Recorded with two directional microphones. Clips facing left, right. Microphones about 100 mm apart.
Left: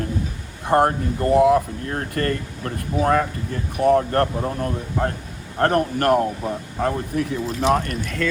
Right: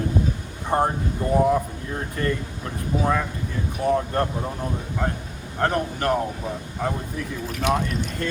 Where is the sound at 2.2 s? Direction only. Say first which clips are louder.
Left 1 dB; 65° left (ahead or behind).